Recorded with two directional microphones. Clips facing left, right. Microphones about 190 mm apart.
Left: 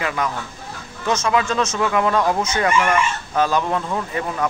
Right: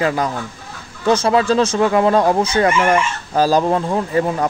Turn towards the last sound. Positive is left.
turn(degrees=-35)  # may be behind; listen again after turning